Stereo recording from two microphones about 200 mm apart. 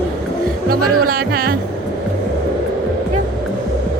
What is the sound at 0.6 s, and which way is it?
Speech, 50° right (ahead or behind).